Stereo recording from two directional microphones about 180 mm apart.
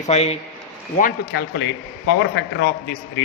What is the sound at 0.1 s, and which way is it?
Speech, 35° left (ahead or behind).